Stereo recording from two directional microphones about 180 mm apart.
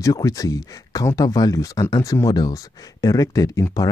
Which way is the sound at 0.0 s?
20° left (ahead or behind).